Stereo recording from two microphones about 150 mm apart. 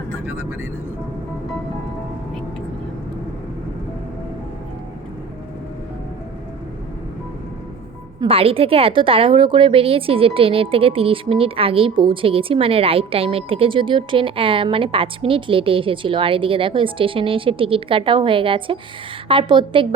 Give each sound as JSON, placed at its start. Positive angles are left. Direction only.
{"t": 8.2, "sound": "a woman's voice", "side_deg": -40}